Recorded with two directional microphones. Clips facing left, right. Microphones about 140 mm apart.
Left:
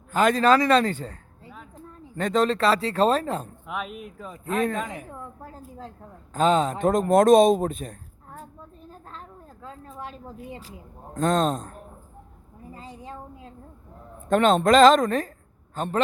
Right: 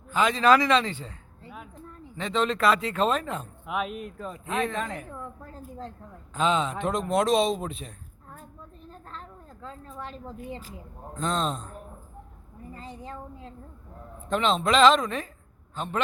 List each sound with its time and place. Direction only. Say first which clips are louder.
0.1 s a man's voice: left 2 dB; 45° left (ahead or behind)
2.1 s speech: left 4 dB; 45° left (ahead or behind)
3.7 s speech: right 3 dB; centre (ahead or behind)
4.5 s a man's voice: left 4 dB; 45° left (ahead or behind)
4.8 s a woman's voice: left 1 dB; 10° left (ahead or behind)
6.3 s a man's voice: left 4 dB; 45° left (ahead or behind)
8.9 s a sound: right 1 dB; 10° left (ahead or behind)
11.1 s a man's voice: left 6 dB; 45° left (ahead or behind)
12.7 s a woman's voice: even; 15° left (ahead or behind)
14.3 s a man's voice: left 6 dB; 50° left (ahead or behind)